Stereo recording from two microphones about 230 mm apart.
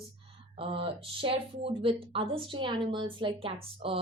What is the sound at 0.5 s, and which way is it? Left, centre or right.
A woman's voice, right.